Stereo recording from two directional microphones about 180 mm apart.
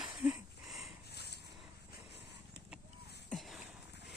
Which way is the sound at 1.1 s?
65° left (ahead or behind).